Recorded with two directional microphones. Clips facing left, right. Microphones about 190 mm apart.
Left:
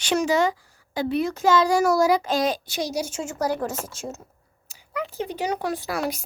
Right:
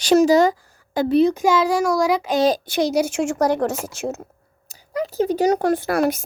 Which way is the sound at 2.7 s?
65° right (ahead or behind).